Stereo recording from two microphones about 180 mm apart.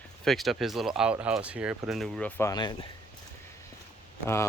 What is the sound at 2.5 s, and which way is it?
Speech, 20° left (ahead or behind).